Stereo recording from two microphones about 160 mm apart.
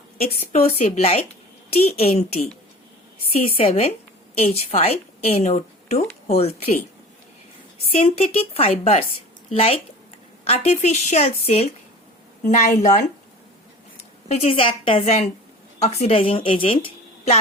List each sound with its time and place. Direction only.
0.2 s a woman's voice: 40° left (ahead or behind)
7.9 s a woman's voice: 40° left (ahead or behind)
12.5 s speech: 50° left (ahead or behind)
14.3 s a woman's voice: 40° left (ahead or behind)